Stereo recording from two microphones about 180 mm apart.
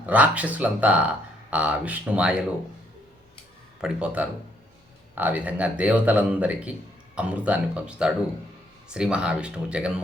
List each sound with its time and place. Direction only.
0.0 s speech: 10° right (ahead or behind)
3.8 s speech: 5° right (ahead or behind)